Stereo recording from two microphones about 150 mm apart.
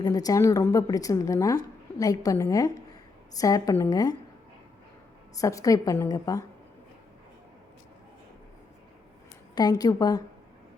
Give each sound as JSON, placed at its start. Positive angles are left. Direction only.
{"t": 0.0, "sound": "a woman's voice", "side_deg": 25}
{"t": 5.4, "sound": "a woman's voice", "side_deg": 20}
{"t": 9.6, "sound": "a woman's voice", "side_deg": 25}